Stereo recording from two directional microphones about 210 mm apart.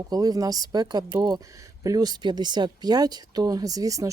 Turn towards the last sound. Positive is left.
turn(degrees=-15)  # may be behind; listen again after turning